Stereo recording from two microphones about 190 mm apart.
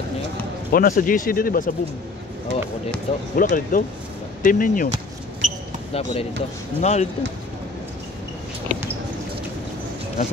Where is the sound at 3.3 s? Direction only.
45° left (ahead or behind).